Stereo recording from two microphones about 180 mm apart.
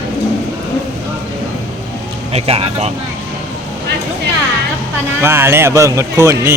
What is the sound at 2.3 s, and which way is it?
Speech, 35° right (ahead or behind).